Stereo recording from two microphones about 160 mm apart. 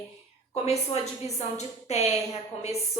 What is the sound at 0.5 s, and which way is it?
A woman's voice, 40° left (ahead or behind).